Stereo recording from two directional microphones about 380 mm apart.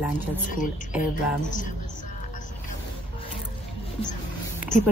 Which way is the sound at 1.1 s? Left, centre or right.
Centre.